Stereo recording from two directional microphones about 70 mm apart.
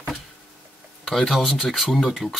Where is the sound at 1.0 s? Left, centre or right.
Centre.